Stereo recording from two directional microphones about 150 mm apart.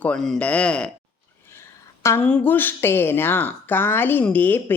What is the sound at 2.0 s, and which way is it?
Speech, 10° left (ahead or behind).